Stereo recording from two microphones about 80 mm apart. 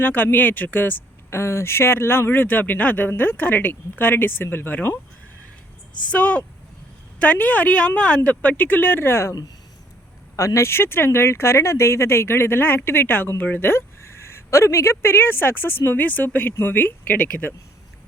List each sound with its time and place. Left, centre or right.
0.0 s speech: left
6.1 s speech: centre
10.3 s speech: left